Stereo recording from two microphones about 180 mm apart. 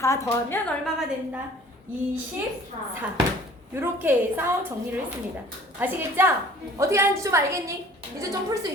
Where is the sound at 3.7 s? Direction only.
10° right (ahead or behind).